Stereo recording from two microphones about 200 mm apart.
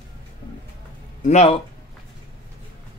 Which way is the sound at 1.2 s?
35° left (ahead or behind).